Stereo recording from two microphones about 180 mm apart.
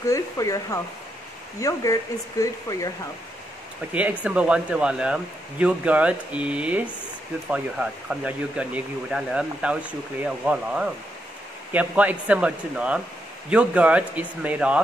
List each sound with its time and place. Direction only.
0.0 s a sound: 20° left (ahead or behind)
1.6 s speech: 20° left (ahead or behind)
3.9 s speech: 5° right (ahead or behind)